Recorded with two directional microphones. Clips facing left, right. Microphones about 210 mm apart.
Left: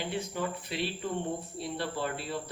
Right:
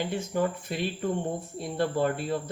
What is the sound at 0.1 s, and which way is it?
Speech, 45° right (ahead or behind).